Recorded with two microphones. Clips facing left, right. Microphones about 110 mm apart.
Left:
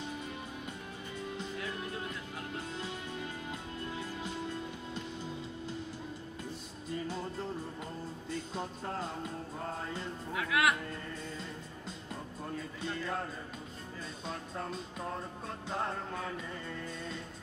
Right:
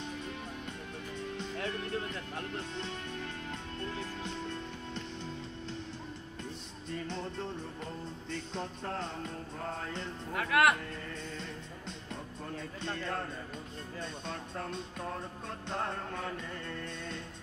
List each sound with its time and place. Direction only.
1.8 s music: 10° left (ahead or behind)
6.9 s music: 5° left (ahead or behind)
10.3 s speech: 50° right (ahead or behind)
14.2 s music: 5° left (ahead or behind)